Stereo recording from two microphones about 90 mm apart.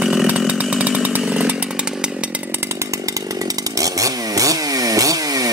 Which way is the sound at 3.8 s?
40° right (ahead or behind).